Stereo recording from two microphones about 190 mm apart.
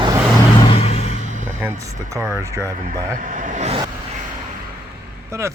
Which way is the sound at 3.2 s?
40° right (ahead or behind).